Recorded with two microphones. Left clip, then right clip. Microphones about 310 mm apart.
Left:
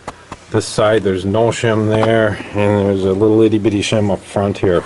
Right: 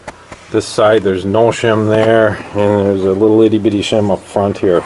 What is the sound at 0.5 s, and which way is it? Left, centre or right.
Speech, centre.